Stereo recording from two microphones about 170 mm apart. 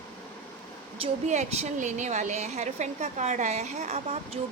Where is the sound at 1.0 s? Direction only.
40° right (ahead or behind).